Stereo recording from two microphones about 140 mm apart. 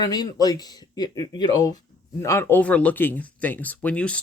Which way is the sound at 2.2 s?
20° left (ahead or behind).